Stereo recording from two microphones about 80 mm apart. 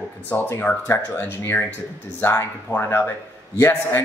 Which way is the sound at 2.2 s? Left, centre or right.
Left.